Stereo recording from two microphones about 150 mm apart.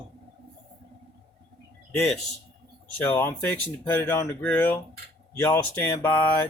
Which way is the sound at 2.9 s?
10° left (ahead or behind).